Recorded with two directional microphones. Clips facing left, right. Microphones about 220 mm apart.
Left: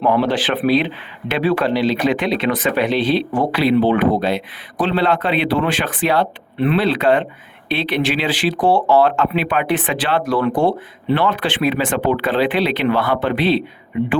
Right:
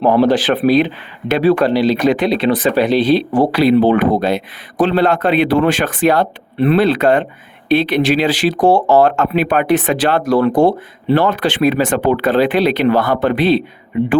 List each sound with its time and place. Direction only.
0.0 s speech: 40° right (ahead or behind)